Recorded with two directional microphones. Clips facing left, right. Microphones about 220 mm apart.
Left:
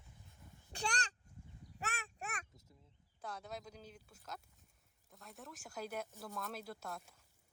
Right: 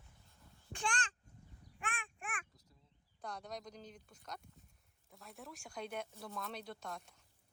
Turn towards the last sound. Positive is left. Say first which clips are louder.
# even
turn(degrees=5)  # may be behind; listen again after turning